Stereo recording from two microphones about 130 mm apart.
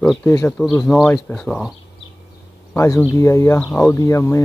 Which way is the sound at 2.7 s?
25° left (ahead or behind).